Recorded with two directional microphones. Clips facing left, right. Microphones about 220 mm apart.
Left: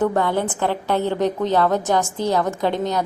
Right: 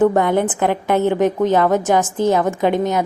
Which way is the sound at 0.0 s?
15° right (ahead or behind).